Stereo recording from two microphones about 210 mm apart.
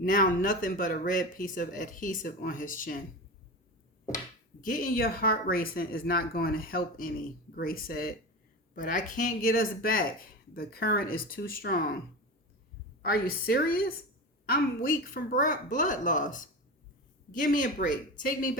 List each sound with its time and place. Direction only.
0.0 s speech: 40° left (ahead or behind)
4.6 s speech: 40° left (ahead or behind)
13.0 s speech: 45° left (ahead or behind)